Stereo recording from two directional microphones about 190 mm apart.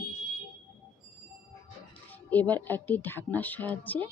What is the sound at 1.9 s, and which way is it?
Speech, 10° left (ahead or behind).